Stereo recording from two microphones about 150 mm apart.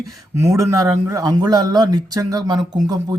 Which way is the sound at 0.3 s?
20° right (ahead or behind).